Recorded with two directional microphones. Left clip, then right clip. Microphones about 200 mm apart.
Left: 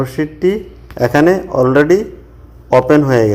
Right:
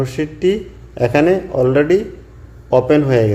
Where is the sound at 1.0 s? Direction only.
15° left (ahead or behind).